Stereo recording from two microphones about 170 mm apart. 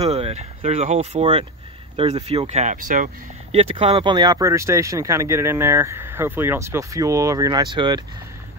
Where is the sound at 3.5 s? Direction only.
35° right (ahead or behind).